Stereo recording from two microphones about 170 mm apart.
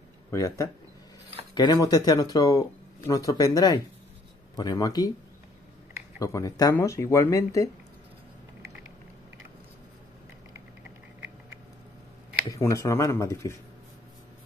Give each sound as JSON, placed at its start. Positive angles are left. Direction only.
{"t": 0.3, "sound": "speech", "side_deg": 20}
{"t": 6.1, "sound": "speech", "side_deg": 20}
{"t": 12.4, "sound": "speech", "side_deg": 20}